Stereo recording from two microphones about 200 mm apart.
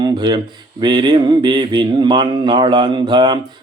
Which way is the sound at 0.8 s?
20° right (ahead or behind).